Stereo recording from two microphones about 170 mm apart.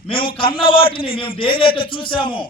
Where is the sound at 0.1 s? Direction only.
30° left (ahead or behind).